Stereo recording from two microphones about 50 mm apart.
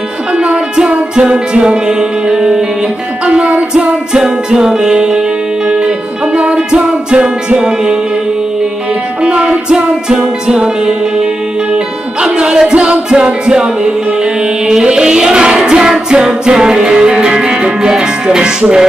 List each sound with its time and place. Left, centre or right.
0.3 s music: right
3.3 s music: centre
9.2 s music: centre